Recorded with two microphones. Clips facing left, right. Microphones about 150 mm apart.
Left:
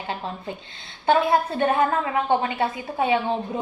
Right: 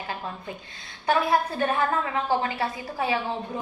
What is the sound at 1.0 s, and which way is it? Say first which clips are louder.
A woman's voice: left 3 dB; 25° left (ahead or behind).